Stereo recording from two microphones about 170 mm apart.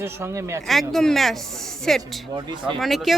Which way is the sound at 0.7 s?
Centre (ahead or behind).